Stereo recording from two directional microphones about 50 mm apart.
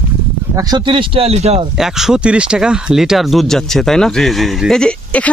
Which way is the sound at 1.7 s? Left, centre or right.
Centre.